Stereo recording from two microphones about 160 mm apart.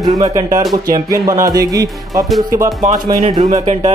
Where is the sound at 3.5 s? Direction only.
40° right (ahead or behind).